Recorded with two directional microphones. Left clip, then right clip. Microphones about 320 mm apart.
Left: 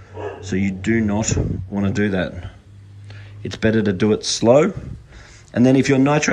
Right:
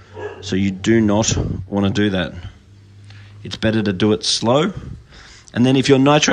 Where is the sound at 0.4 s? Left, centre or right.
Centre.